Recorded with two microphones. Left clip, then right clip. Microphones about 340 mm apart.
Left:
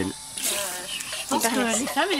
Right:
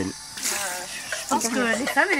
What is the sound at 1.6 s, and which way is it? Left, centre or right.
Speech, centre.